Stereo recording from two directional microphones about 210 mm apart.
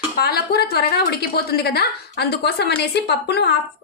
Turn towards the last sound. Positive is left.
turn(degrees=50)  # may be behind; listen again after turning